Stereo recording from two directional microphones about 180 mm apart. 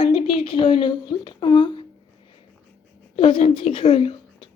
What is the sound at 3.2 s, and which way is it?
A woman's voice, 30° left (ahead or behind).